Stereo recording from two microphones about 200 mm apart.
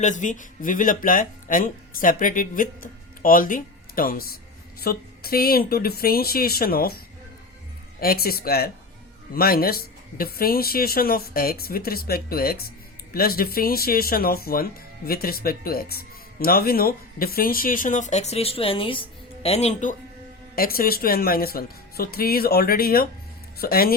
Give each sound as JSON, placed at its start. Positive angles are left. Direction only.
{"t": 0.0, "sound": "speech", "side_deg": 40}
{"t": 8.0, "sound": "speech", "side_deg": 50}
{"t": 20.6, "sound": "speech", "side_deg": 45}